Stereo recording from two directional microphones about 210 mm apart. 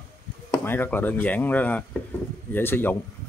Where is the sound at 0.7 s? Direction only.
10° left (ahead or behind).